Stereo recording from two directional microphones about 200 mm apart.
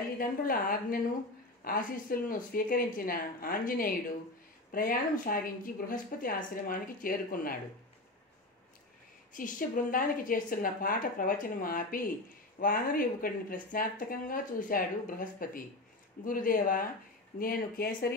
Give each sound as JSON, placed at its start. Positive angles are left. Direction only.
{"t": 0.2, "sound": "speech", "side_deg": 45}
{"t": 9.3, "sound": "speech", "side_deg": 40}